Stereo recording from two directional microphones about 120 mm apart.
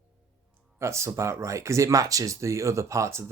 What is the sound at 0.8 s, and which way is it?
Speech, 25° right (ahead or behind).